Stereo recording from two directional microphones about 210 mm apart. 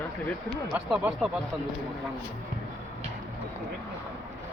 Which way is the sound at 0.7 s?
Centre (ahead or behind).